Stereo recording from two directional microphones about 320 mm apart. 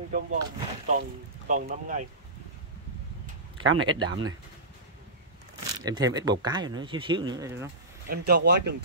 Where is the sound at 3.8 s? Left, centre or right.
Centre.